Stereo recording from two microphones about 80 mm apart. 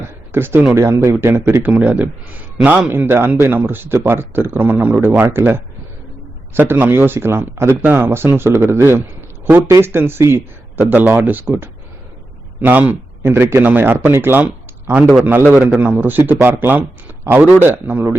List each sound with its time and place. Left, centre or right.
0.3 s speech: right
12.6 s speech: centre
15.4 s speech: centre